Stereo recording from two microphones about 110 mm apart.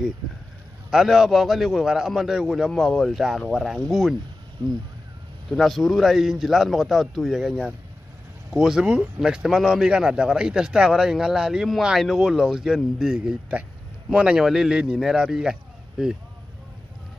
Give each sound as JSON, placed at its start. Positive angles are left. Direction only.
{"t": 0.8, "sound": "speech", "side_deg": -5}
{"t": 5.5, "sound": "speech", "side_deg": 0}